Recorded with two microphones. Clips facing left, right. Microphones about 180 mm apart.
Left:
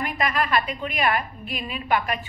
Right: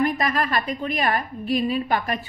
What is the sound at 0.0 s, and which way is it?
A woman's voice, 40° right (ahead or behind).